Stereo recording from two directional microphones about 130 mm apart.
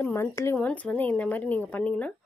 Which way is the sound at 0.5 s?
10° left (ahead or behind).